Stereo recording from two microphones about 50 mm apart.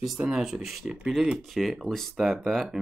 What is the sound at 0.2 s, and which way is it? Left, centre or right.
Speech, centre.